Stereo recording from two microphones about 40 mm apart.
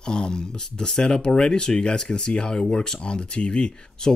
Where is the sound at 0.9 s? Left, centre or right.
Centre.